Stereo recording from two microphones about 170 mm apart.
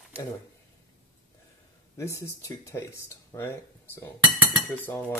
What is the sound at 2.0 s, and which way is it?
Speech, 15° left (ahead or behind).